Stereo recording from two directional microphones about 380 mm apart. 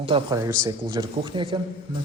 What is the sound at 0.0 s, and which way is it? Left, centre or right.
A man's voice, centre.